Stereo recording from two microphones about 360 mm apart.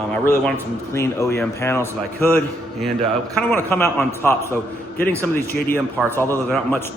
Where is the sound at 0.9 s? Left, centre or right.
Centre.